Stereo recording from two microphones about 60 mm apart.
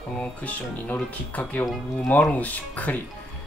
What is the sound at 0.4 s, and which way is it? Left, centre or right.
Speech, left.